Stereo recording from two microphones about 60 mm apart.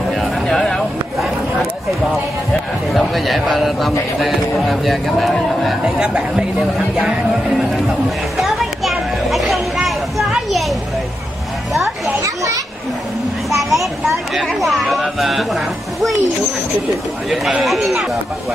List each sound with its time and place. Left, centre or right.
0.1 s a sound: centre
2.9 s speech: centre
5.9 s speech: centre
8.4 s children playing: centre
13.6 s children playing: centre
14.3 s speech: centre
17.6 s speech: centre